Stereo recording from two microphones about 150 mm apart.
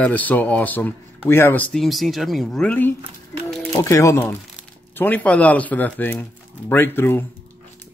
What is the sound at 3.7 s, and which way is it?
Speech, 20° left (ahead or behind).